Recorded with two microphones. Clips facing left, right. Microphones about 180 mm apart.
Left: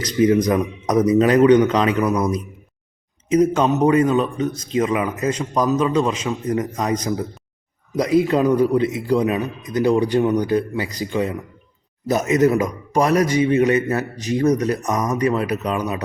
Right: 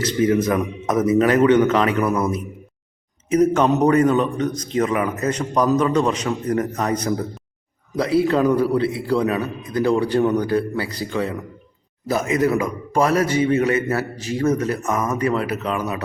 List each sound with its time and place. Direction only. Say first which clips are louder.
0.3 s speech: left 2 dB; 20° left (ahead or behind)
7.9 s speech: left 1 dB; 15° left (ahead or behind)
12.0 s a man's voice: left 3 dB; 20° left (ahead or behind)